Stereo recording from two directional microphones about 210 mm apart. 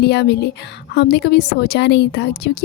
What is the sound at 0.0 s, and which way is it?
A woman's voice, 55° left (ahead or behind).